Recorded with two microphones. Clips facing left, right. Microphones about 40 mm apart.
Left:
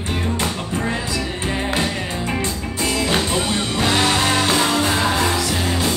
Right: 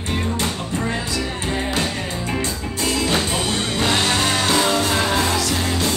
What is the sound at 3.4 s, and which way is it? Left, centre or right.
Music, centre.